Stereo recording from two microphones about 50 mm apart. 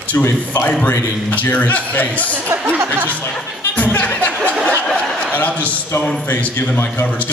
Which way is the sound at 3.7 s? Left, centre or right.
Left.